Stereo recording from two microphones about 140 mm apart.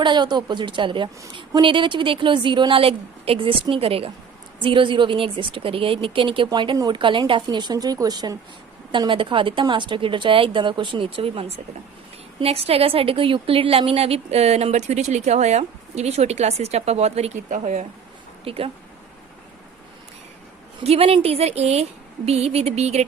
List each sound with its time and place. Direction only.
0.0 s a woman's voice: 30° right (ahead or behind); by 17.6 s 55° right (ahead or behind)
18.4 s a woman's voice: 45° right (ahead or behind)
20.8 s a woman's voice: 45° right (ahead or behind)